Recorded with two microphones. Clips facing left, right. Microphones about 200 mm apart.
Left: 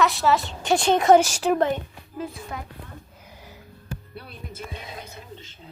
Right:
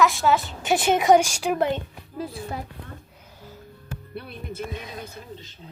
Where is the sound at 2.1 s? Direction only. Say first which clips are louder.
Right 1 dB; 35° right (ahead or behind).